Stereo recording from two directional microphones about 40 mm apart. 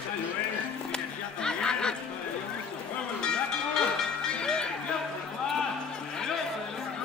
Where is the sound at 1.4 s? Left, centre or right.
Left.